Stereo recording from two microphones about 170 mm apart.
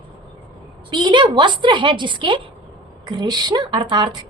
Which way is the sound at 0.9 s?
25° right (ahead or behind).